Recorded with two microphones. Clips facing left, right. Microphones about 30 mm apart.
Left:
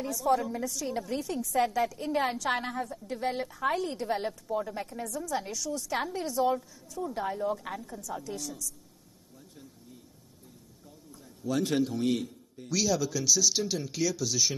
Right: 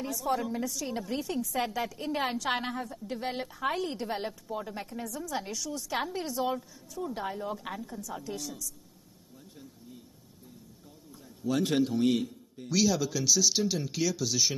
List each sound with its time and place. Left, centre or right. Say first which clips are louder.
0.0 s a woman's voice: left 3 dB; centre
11.1 s a man's voice: right 2 dB; centre